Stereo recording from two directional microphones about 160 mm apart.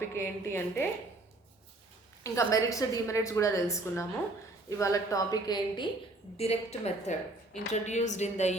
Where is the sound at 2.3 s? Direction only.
20° left (ahead or behind).